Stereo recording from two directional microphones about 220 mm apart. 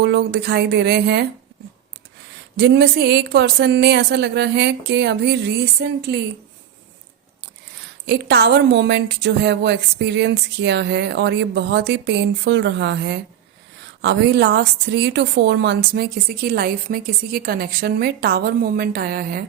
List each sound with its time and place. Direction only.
0.0 s a woman's voice: 50° right (ahead or behind)
2.6 s a woman's voice: 50° right (ahead or behind)
8.0 s a woman's voice: 50° right (ahead or behind)